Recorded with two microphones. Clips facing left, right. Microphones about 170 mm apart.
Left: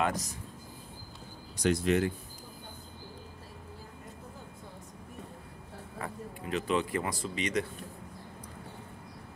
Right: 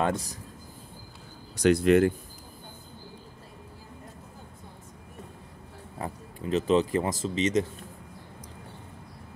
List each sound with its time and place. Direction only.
0.0 s speech: 30° right (ahead or behind)
1.6 s speech: 60° right (ahead or behind)
5.9 s speech: 25° right (ahead or behind)